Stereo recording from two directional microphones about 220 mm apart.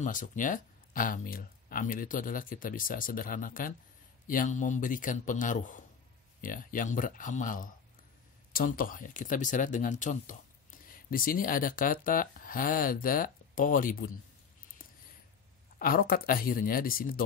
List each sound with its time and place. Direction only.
0.0 s speech: 35° left (ahead or behind)
15.8 s speech: 40° left (ahead or behind)